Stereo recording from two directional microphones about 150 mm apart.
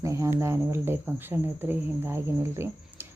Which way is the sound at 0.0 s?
20° right (ahead or behind).